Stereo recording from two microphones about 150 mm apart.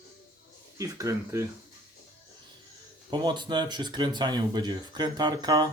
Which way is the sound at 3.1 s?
30° right (ahead or behind).